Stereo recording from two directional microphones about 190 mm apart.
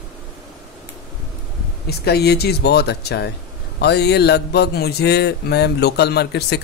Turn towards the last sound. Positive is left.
turn(degrees=60)  # may be behind; listen again after turning